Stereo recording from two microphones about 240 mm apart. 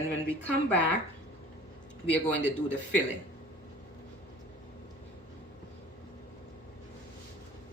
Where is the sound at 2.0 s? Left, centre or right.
Centre.